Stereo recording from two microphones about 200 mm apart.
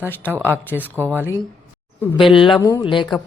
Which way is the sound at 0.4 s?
10° left (ahead or behind).